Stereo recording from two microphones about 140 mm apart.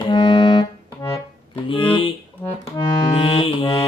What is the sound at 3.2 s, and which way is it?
Mantra, 40° left (ahead or behind).